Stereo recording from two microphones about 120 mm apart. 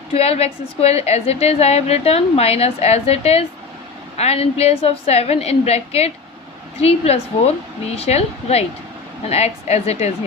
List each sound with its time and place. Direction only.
0.1 s a woman's voice: 60° left (ahead or behind)